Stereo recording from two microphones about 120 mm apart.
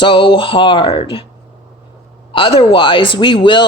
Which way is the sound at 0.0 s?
40° left (ahead or behind).